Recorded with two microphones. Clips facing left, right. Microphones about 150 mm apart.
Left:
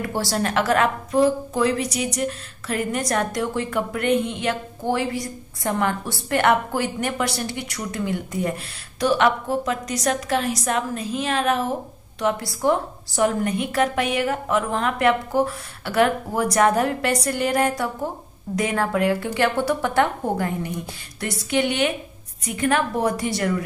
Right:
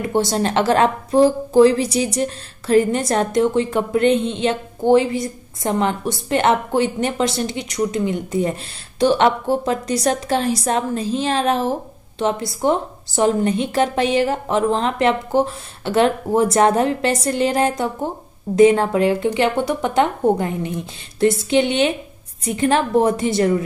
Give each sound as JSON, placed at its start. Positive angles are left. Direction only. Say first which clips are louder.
{"t": 0.0, "sound": "a woman's voice", "louder": "right 5 dB", "side_deg": -20}